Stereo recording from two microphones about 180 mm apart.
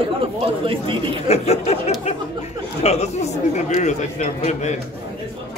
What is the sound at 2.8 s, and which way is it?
Speech, 40° left (ahead or behind).